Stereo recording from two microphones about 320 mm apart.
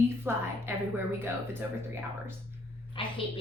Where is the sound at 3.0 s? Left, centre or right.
Centre.